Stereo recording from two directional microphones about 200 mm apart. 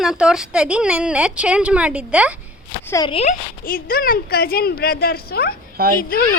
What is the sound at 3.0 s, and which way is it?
Speech, 30° left (ahead or behind).